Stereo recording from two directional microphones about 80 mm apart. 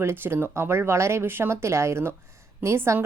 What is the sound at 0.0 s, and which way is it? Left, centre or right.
Speech, right.